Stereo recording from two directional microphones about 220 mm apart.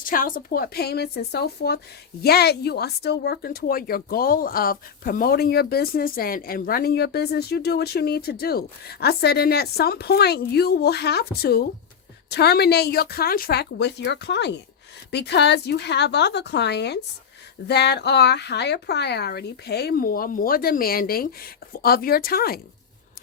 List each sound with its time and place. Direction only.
0.0 s speech: 40° left (ahead or behind)